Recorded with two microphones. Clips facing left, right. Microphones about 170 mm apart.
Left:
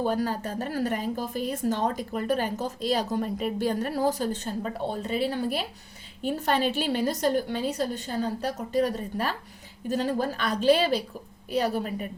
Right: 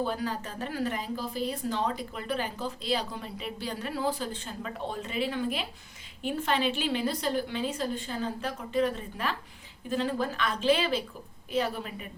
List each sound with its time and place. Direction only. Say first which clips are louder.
0.0 s a woman's voice: left 4 dB; 40° left (ahead or behind)